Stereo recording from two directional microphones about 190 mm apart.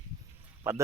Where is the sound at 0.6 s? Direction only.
10° right (ahead or behind).